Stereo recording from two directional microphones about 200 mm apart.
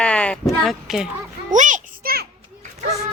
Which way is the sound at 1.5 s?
40° right (ahead or behind).